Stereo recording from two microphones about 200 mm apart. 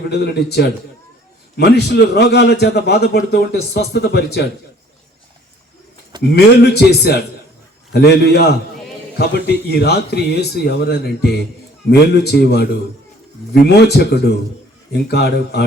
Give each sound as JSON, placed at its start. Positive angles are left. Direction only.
{"t": 0.1, "sound": "a man's voice", "side_deg": 55}
{"t": 6.3, "sound": "a man's voice", "side_deg": 55}